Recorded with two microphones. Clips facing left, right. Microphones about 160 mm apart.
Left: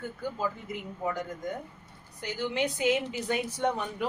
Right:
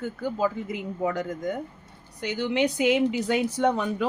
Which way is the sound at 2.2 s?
85° right.